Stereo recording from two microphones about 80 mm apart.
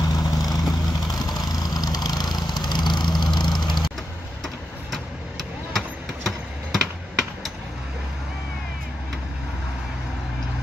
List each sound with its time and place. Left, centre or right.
0.0 s vehicle: left
4.9 s vehicle: centre